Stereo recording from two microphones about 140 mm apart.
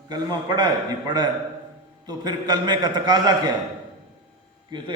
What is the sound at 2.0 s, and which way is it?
A man's voice, 30° right (ahead or behind).